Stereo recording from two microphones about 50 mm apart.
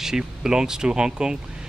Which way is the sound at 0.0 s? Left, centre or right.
Centre.